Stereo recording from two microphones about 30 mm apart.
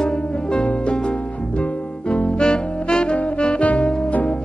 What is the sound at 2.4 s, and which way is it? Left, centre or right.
Saxophone, left.